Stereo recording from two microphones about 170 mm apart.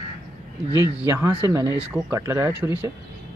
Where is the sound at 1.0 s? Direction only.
10° right (ahead or behind).